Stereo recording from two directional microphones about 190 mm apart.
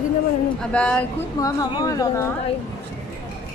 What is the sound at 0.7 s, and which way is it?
Speech, 5° left (ahead or behind).